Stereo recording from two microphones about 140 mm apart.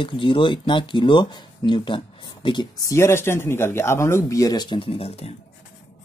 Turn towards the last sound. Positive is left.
turn(degrees=45)  # may be behind; listen again after turning